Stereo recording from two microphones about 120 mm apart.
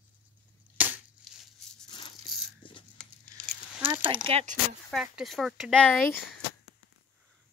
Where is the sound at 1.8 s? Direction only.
45° left (ahead or behind).